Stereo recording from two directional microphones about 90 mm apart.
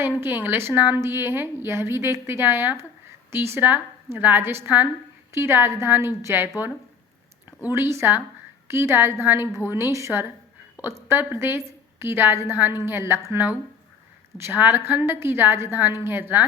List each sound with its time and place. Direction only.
0.0 s a woman's voice: 25° right (ahead or behind)
7.6 s a woman's voice: 25° right (ahead or behind)